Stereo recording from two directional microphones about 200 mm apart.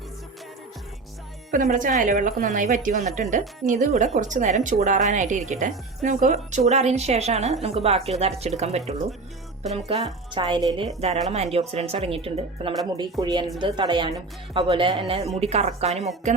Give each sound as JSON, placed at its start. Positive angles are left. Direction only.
{"t": 1.5, "sound": "a woman's voice", "side_deg": -40}